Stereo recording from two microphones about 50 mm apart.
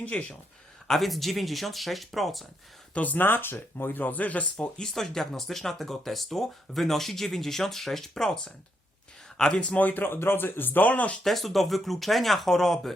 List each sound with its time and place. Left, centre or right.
0.0 s speech: left
0.9 s speech: centre
2.9 s speech: left
4.8 s speech: centre
9.4 s speech: left
10.1 s speech: left
11.2 s speech: centre